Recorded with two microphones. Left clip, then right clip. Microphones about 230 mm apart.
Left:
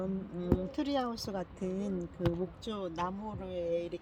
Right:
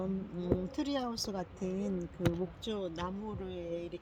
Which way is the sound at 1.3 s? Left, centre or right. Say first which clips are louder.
Left 1 dB; centre.